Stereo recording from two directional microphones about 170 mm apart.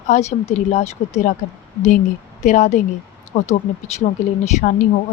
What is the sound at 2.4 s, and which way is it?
A woman's voice, 45° left (ahead or behind).